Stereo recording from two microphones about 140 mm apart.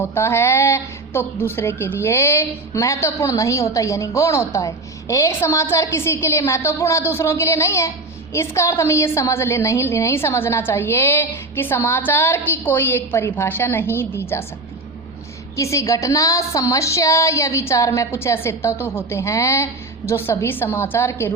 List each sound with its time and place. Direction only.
0.0 s a woman's voice: 15° left (ahead or behind)
15.5 s a woman's voice: 20° left (ahead or behind)